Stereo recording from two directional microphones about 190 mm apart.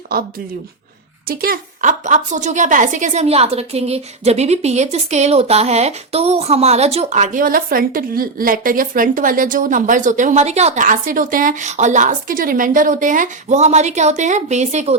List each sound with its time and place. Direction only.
1.3 s a woman's voice: 50° right (ahead or behind)